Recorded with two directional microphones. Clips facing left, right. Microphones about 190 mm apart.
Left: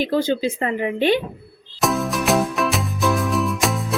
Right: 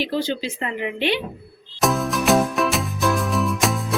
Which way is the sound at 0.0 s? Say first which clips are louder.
Left 4 dB; 50° left (ahead or behind).